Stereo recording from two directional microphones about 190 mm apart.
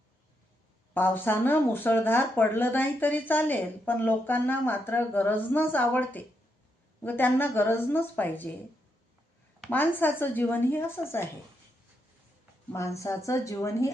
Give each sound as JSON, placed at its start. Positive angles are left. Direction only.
{"t": 0.9, "sound": "speech", "side_deg": 10}
{"t": 9.6, "sound": "speech", "side_deg": 10}
{"t": 12.7, "sound": "speech", "side_deg": 15}